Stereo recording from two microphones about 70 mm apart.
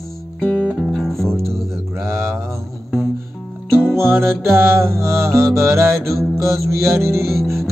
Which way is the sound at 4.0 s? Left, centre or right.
Right.